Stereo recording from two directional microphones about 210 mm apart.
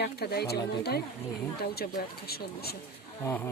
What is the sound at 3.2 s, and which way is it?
Speech, 10° left (ahead or behind).